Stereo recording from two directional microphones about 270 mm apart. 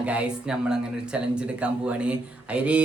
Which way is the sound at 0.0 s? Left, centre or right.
Centre.